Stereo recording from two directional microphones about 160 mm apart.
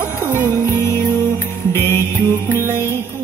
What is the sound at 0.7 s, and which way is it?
Music, 15° left (ahead or behind).